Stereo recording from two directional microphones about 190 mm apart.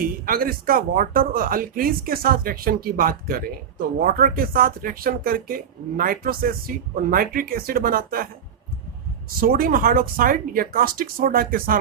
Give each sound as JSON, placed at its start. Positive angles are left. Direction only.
{"t": 0.0, "sound": "speech", "side_deg": -50}
{"t": 9.4, "sound": "speech", "side_deg": -50}